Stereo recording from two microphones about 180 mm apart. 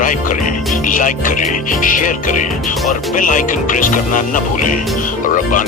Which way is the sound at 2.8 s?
Centre (ahead or behind).